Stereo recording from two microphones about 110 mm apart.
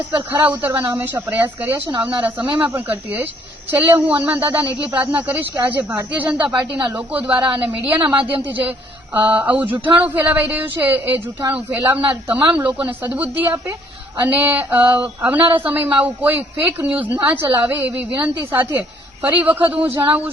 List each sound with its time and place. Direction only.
0.4 s speech: 15° right (ahead or behind)
19.3 s speech: 15° right (ahead or behind)